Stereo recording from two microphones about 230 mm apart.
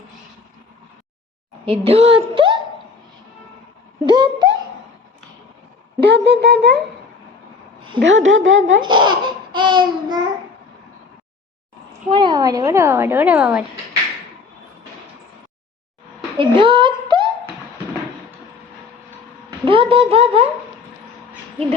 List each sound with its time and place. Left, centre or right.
1.6 s speech: right
4.0 s speech: centre
6.0 s speech: right
8.0 s a woman's voice: right
8.8 s speech: centre
12.0 s a woman's voice: right
16.4 s a sound: right
19.5 s a woman's voice: right